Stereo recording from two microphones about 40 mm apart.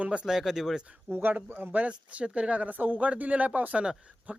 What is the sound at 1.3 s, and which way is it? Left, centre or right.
Speech, right.